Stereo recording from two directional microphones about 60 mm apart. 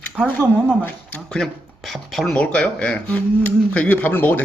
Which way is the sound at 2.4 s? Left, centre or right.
Centre.